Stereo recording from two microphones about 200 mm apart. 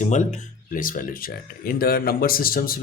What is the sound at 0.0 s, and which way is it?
Speech, 35° left (ahead or behind).